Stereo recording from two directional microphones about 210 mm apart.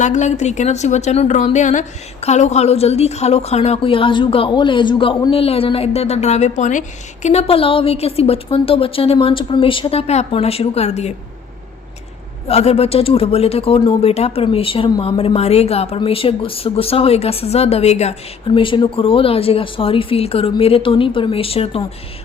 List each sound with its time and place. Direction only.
0.0 s a woman's voice: 35° left (ahead or behind)
12.5 s speech: 30° left (ahead or behind)